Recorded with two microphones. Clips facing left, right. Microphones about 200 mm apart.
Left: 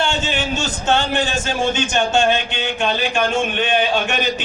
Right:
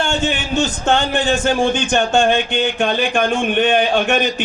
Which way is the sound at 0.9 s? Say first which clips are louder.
Right 1 dB; 55° right (ahead or behind).